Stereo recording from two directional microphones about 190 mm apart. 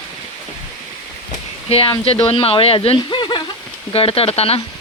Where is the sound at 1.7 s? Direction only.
30° left (ahead or behind).